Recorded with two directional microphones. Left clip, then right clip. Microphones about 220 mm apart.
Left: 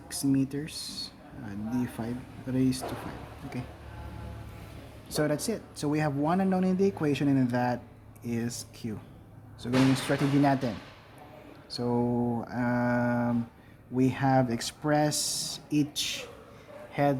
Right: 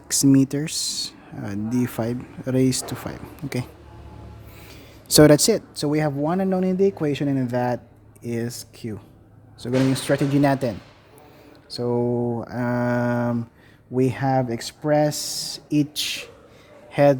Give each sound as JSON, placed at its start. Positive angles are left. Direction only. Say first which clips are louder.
{"t": 0.1, "sound": "speech", "louder": "right 11 dB", "side_deg": -50}
{"t": 5.0, "sound": "speech", "louder": "right 15 dB", "side_deg": -50}
{"t": 11.7, "sound": "speech", "louder": "right 6 dB", "side_deg": -30}